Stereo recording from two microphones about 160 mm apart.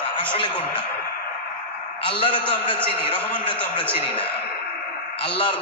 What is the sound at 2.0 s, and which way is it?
A man's voice, 30° left (ahead or behind).